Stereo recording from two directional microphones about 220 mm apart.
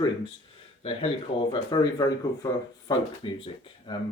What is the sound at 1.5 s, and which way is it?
Speech, 15° left (ahead or behind).